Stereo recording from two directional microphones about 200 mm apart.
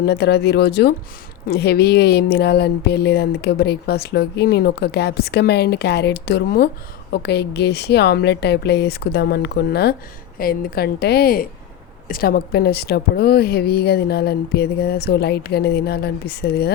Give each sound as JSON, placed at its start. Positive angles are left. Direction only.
{"t": 0.0, "sound": "a woman's voice", "side_deg": 55}